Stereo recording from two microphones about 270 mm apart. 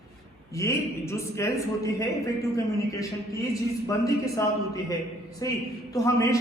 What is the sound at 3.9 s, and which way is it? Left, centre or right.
A man's voice, centre.